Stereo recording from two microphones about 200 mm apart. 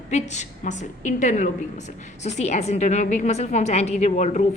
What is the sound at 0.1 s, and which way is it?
A woman's voice, 35° left (ahead or behind).